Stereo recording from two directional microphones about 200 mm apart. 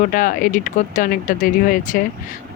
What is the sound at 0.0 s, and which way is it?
Speech, 40° left (ahead or behind).